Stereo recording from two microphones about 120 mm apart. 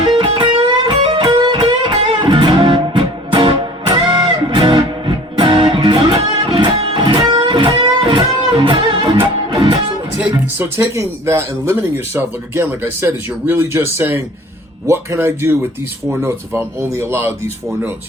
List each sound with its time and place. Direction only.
0.0 s music: 45° right (ahead or behind)
10.6 s speech: 20° right (ahead or behind)